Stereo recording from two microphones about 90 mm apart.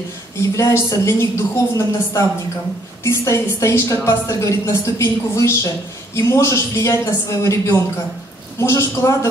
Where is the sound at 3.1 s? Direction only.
35° left (ahead or behind).